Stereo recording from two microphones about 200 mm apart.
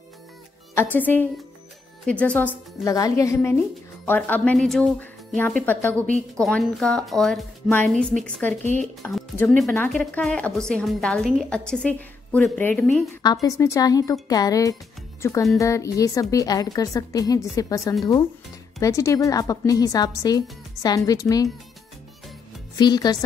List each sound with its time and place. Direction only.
0.7 s a woman's voice: 10° left (ahead or behind)
13.2 s a woman's voice: 20° left (ahead or behind)
22.8 s speech: 20° left (ahead or behind)